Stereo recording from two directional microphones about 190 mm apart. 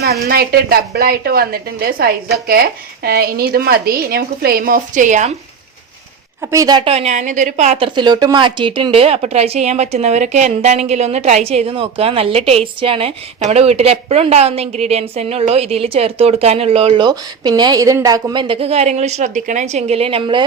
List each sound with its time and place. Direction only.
0.3 s a woman's voice: 55° right (ahead or behind)
6.5 s a woman's voice: 20° right (ahead or behind)